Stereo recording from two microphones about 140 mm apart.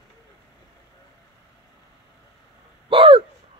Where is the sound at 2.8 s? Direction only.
40° right (ahead or behind).